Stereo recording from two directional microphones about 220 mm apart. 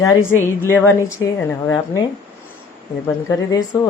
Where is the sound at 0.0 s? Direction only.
15° left (ahead or behind).